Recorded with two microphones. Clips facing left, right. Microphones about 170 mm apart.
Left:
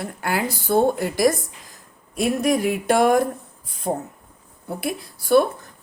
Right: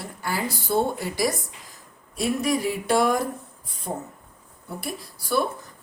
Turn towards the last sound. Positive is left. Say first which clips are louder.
# left 8 dB
turn(degrees=55)  # may be behind; listen again after turning